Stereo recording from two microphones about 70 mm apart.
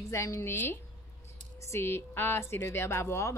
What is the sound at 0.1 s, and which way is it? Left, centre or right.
Speech, left.